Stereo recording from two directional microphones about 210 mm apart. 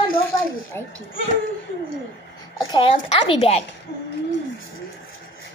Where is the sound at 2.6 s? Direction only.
20° left (ahead or behind).